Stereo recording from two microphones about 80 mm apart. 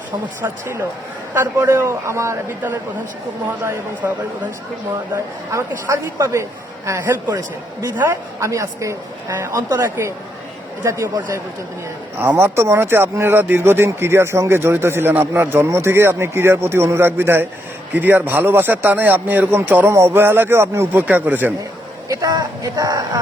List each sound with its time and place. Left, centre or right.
1.3 s speech: right
4.0 s speech: right
8.4 s speech: right
12.2 s a man's voice: right
22.1 s speech: right